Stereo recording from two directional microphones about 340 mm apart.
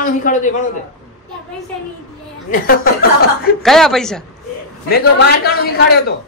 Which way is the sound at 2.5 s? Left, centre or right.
Left.